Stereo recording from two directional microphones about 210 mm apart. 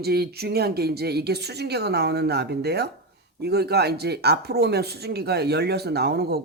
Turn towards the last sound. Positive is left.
turn(degrees=-50)  # may be behind; listen again after turning